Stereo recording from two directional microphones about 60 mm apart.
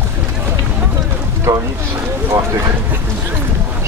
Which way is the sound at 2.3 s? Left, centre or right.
Right.